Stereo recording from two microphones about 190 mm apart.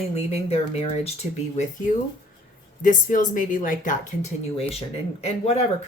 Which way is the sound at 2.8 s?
45° left (ahead or behind).